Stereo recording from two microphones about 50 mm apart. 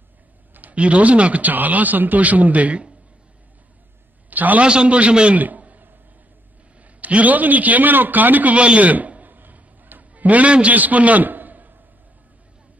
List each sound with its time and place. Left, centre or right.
0.6 s speech: right
4.3 s a man's voice: right
4.6 s a man's voice: right
5.4 s a sound: right
6.8 s speech: right
8.5 s a sound: right